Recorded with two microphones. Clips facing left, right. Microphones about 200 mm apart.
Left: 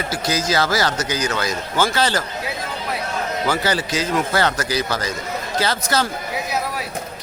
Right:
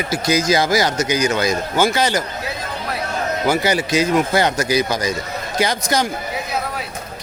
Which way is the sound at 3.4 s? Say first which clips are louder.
Right 4 dB; 10° right (ahead or behind).